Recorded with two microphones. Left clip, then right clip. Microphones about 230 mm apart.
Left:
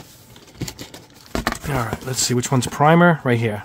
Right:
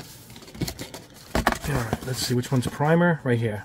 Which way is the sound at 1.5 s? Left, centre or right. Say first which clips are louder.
Left 4 dB; left.